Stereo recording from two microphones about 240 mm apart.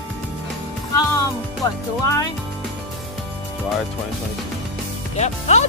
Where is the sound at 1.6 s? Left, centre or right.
Centre.